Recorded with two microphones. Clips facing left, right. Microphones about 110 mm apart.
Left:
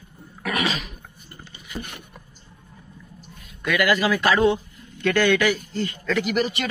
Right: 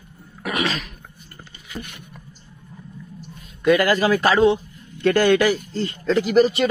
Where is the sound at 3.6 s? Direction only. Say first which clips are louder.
Right 4 dB; 35° right (ahead or behind).